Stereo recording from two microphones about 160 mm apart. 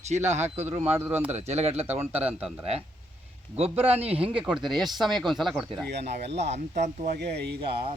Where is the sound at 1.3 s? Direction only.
45° right (ahead or behind).